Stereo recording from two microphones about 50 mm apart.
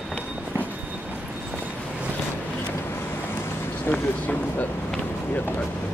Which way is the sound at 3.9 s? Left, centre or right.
Left.